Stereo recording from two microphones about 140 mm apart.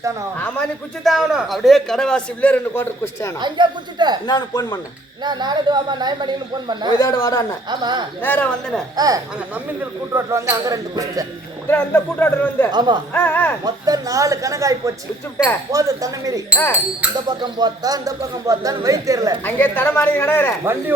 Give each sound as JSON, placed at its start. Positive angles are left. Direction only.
{"t": 0.3, "sound": "speech", "side_deg": 10}
{"t": 1.0, "sound": "a man's voice", "side_deg": 0}
{"t": 3.4, "sound": "speech", "side_deg": -30}
{"t": 4.3, "sound": "speech", "side_deg": 30}
{"t": 5.2, "sound": "speech", "side_deg": -30}
{"t": 7.0, "sound": "speech", "side_deg": 20}
{"t": 7.7, "sound": "speech", "side_deg": -30}
{"t": 8.2, "sound": "speech", "side_deg": 10}
{"t": 9.0, "sound": "speech", "side_deg": -25}
{"t": 11.7, "sound": "speech", "side_deg": 15}
{"t": 12.7, "sound": "speech", "side_deg": -30}
{"t": 13.1, "sound": "speech", "side_deg": 15}
{"t": 13.7, "sound": "speech", "side_deg": -25}
{"t": 19.5, "sound": "speech", "side_deg": 15}